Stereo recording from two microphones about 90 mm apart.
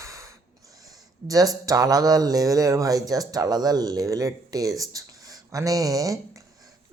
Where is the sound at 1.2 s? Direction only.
40° right (ahead or behind).